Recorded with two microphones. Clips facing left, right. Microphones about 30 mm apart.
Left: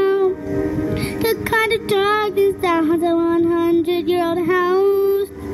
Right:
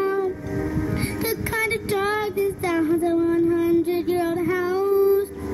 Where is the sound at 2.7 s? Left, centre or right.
Left.